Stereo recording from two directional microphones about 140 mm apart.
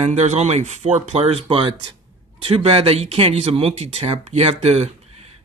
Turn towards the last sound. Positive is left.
turn(degrees=-50)  # may be behind; listen again after turning